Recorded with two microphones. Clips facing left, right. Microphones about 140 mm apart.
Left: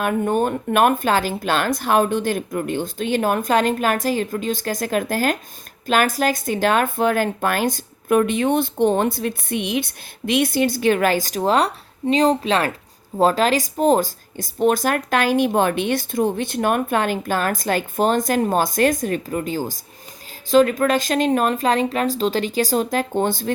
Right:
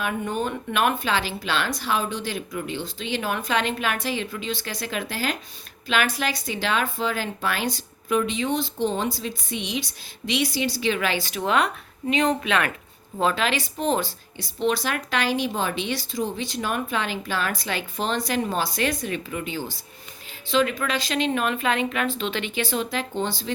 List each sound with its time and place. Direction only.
0.0 s speech: 50° left (ahead or behind)